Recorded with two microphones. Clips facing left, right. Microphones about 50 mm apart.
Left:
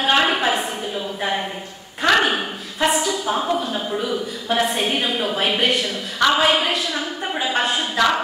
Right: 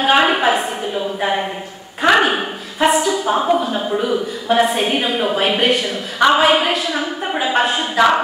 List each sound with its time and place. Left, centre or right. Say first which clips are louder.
0.0 s a woman's voice: right 4 dB; centre